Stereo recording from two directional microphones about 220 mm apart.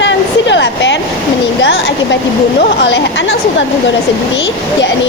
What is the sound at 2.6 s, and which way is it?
Speech, 55° left (ahead or behind).